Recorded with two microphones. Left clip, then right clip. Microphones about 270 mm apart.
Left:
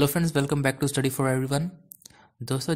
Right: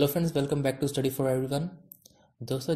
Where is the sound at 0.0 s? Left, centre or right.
Left.